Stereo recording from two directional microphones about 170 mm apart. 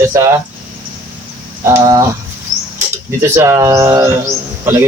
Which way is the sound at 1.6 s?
20° right (ahead or behind).